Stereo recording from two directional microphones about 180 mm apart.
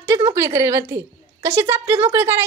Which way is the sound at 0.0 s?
15° right (ahead or behind).